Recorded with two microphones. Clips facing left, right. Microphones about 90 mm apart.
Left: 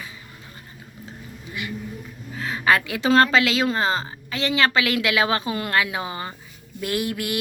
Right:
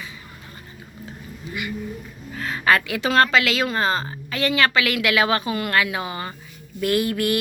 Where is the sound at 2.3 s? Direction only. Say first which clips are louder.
Right 1 dB; 15° left (ahead or behind).